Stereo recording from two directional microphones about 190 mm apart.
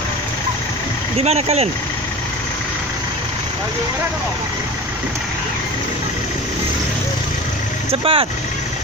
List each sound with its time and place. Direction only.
1.1 s speech: 35° right (ahead or behind)
7.9 s speech: 30° right (ahead or behind)